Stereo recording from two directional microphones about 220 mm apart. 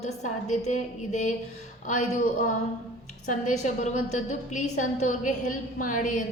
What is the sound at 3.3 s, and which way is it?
Female singing, 35° left (ahead or behind).